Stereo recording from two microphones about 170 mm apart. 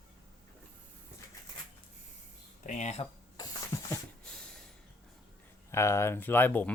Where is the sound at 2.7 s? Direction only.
45° left (ahead or behind).